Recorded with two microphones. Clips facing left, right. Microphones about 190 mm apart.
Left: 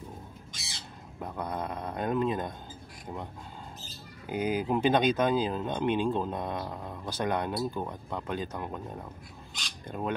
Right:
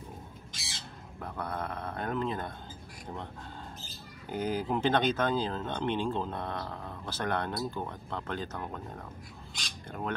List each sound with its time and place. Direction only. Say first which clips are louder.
1.2 s speech: left 2 dB; 15° left (ahead or behind)
4.3 s speech: left 3 dB; 15° left (ahead or behind)
9.8 s speech: left 3 dB; 15° left (ahead or behind)